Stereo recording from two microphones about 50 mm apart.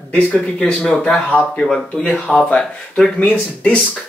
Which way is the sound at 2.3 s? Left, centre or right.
Centre.